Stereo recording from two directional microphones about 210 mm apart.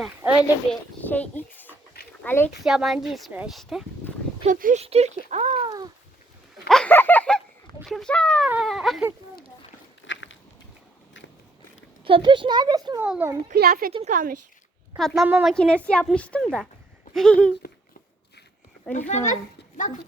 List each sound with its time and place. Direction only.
0.2 s speech: 10° right (ahead or behind)
0.7 s speech: 5° left (ahead or behind)
2.6 s speech: centre (ahead or behind)
4.4 s speech: 35° right (ahead or behind)
6.7 s a sound: 5° left (ahead or behind)
8.4 s speech: 5° right (ahead or behind)
10.1 s a sound: 60° left (ahead or behind)
12.0 s a child's voice: 25° right (ahead or behind)
13.0 s a child's voice: 10° right (ahead or behind)
13.5 s a woman's voice: 45° right (ahead or behind)
13.9 s speech: 35° right (ahead or behind)
14.9 s speech: centre (ahead or behind)
18.9 s a child's voice: 35° left (ahead or behind)